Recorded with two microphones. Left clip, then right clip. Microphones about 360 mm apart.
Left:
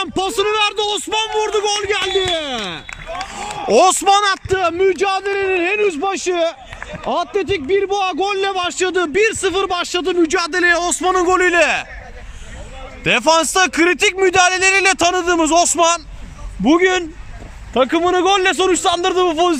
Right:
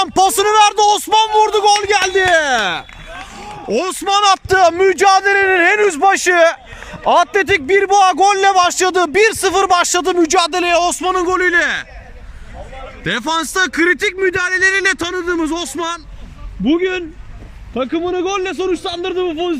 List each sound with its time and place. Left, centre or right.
0.0 s a man's voice: centre
3.7 s a man's voice: centre
13.1 s a man's voice: centre
16.7 s a man's voice: centre